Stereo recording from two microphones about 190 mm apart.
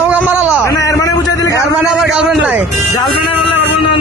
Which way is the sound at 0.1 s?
5° right (ahead or behind).